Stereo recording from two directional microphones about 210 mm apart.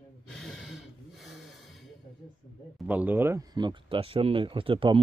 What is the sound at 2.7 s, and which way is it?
Speech, 10° right (ahead or behind).